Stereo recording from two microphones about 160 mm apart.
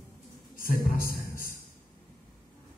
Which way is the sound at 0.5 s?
60° left (ahead or behind).